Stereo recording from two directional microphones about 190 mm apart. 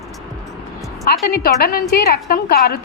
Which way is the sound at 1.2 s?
55° left (ahead or behind).